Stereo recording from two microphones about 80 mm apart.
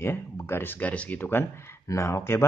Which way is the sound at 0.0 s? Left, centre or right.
Left.